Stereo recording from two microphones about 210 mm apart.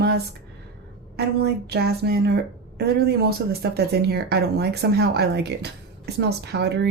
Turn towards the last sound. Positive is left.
turn(degrees=-50)  # may be behind; listen again after turning